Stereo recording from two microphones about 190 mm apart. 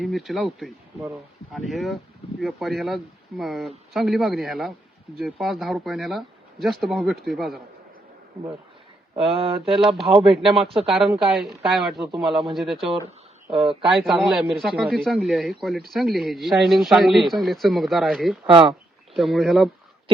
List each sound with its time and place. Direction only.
0.0 s speech: centre (ahead or behind)
9.3 s speech: 30° right (ahead or behind)
10.0 s speech: centre (ahead or behind)
10.6 s speech: 30° right (ahead or behind)
10.8 s speech: centre (ahead or behind)
13.8 s speech: centre (ahead or behind)
18.4 s speech: 25° right (ahead or behind)
19.1 s speech: centre (ahead or behind)